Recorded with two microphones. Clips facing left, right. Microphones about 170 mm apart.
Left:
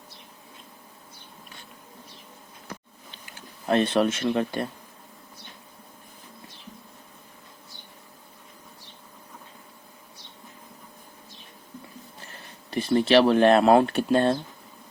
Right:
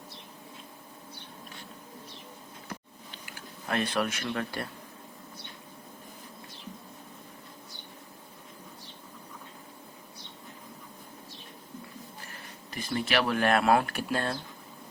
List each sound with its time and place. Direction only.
3.2 s speech: 25° left (ahead or behind)
12.3 s speech: 30° left (ahead or behind)